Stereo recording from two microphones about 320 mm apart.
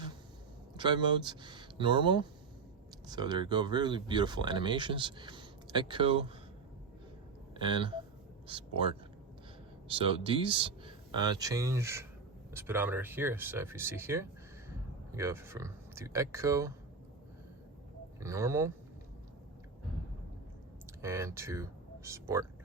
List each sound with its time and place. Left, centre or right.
0.8 s speech: centre
7.5 s hiccup: centre
8.4 s speech: centre
18.2 s speech: centre
21.0 s speech: centre